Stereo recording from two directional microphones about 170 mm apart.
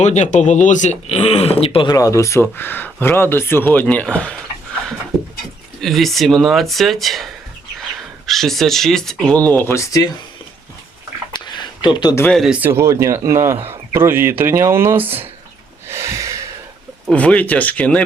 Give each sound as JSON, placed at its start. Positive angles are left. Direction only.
{"t": 0.0, "sound": "speech", "side_deg": 40}
{"t": 5.8, "sound": "speech", "side_deg": 0}
{"t": 8.3, "sound": "speech", "side_deg": 0}
{"t": 11.3, "sound": "a sound", "side_deg": 25}
{"t": 12.2, "sound": "a man's voice", "side_deg": 0}
{"t": 15.9, "sound": "gasp", "side_deg": -15}
{"t": 17.1, "sound": "speech", "side_deg": 10}